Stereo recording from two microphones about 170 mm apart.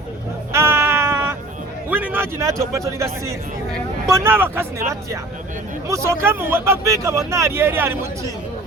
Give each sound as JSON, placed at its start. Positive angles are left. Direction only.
{"t": 0.5, "sound": "a sound", "side_deg": -15}
{"t": 1.9, "sound": "a man's voice", "side_deg": -10}
{"t": 5.9, "sound": "speech", "side_deg": -15}